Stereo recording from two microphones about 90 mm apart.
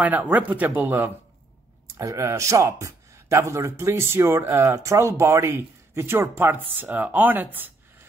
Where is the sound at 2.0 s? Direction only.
35° right (ahead or behind).